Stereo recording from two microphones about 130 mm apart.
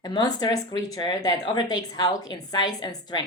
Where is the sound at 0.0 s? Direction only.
30° left (ahead or behind).